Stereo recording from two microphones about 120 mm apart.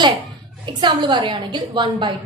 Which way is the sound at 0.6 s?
40° right (ahead or behind).